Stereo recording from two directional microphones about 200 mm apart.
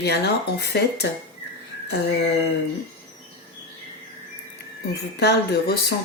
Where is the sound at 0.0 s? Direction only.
55° left (ahead or behind).